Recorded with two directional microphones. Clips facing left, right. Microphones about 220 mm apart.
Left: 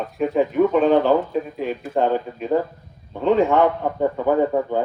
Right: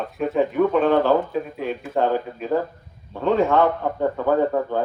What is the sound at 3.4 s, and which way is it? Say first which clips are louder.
A man's voice: right 1 dB; 15° left (ahead or behind).